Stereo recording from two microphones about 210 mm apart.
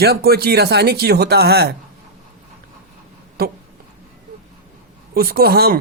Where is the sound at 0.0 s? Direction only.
50° right (ahead or behind).